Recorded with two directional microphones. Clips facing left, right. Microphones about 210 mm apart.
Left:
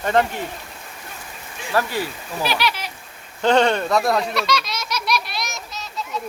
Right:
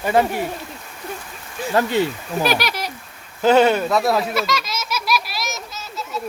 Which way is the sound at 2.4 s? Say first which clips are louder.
Right 2 dB; 45° right (ahead or behind).